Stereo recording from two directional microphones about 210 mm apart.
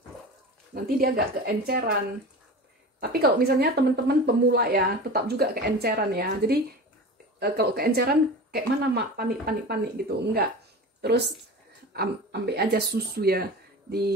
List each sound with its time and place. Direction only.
0.7 s a woman's voice: 40° right (ahead or behind)
3.0 s a woman's voice: 50° right (ahead or behind)